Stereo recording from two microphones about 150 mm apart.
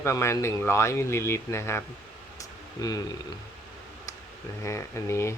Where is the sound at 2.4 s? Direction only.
25° left (ahead or behind).